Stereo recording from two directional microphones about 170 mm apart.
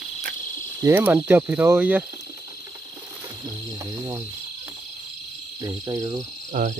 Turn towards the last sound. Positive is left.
turn(degrees=-50)  # may be behind; listen again after turning